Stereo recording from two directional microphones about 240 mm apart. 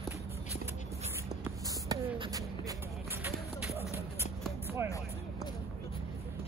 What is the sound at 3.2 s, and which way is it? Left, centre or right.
Run, centre.